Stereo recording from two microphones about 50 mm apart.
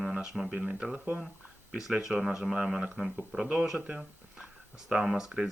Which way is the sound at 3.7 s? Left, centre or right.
Centre.